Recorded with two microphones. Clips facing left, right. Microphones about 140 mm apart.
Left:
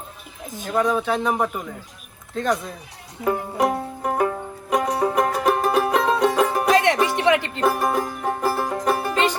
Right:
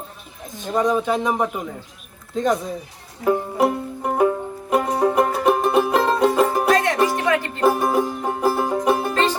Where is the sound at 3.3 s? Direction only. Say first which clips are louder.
Right 3 dB; 5° right (ahead or behind).